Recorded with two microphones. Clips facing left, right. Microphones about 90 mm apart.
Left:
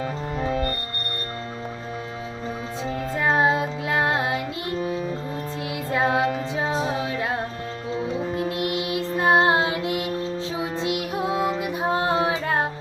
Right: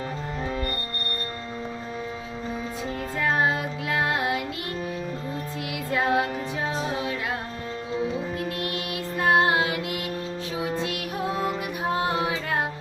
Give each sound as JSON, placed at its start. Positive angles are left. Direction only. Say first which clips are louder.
{"t": 3.2, "sound": "child singing", "louder": "left 4 dB", "side_deg": 25}
{"t": 5.9, "sound": "music", "louder": "left 2 dB", "side_deg": 25}
{"t": 8.4, "sound": "music", "louder": "left 5 dB", "side_deg": 20}